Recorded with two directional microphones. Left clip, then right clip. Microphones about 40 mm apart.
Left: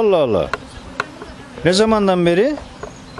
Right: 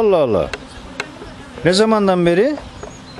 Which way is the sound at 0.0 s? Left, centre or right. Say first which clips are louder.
Right 1 dB; left.